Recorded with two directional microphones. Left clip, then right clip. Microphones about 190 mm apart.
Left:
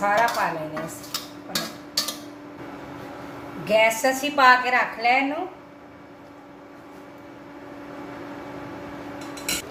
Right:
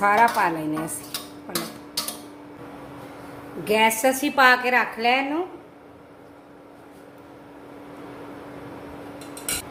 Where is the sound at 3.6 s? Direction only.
55° right (ahead or behind).